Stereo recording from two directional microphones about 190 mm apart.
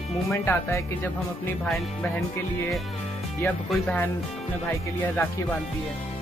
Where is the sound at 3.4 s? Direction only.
10° left (ahead or behind).